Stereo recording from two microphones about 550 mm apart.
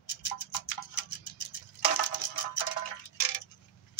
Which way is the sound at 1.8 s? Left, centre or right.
Left.